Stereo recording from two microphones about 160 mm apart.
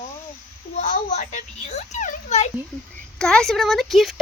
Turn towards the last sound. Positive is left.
turn(degrees=0)  # may be behind; listen again after turning